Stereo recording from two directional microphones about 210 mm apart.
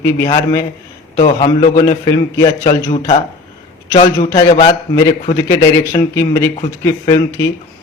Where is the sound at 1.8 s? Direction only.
20° left (ahead or behind).